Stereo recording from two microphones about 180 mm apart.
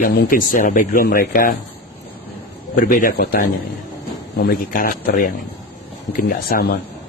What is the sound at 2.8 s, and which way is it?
A man's voice, 50° left (ahead or behind).